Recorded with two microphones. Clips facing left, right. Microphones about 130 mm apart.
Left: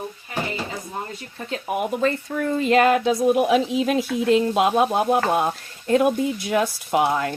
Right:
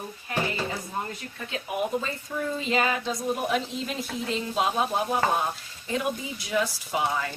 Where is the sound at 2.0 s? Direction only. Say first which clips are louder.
Left 8 dB; 65° left (ahead or behind).